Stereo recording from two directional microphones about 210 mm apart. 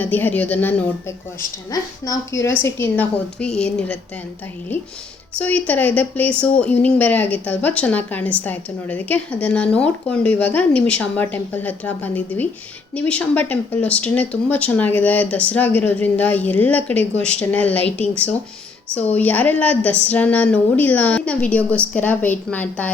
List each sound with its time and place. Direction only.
0.0 s speech: 10° left (ahead or behind)
5.4 s speech: 5° left (ahead or behind)
18.9 s speech: 5° left (ahead or behind)